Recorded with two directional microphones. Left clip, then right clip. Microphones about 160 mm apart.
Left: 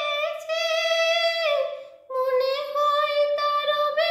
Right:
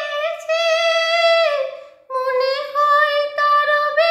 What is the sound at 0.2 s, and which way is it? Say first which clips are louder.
Female singing: right 7 dB; 25° left (ahead or behind).